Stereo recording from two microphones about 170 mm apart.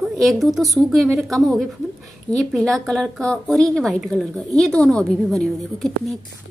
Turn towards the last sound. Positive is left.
turn(degrees=0)  # may be behind; listen again after turning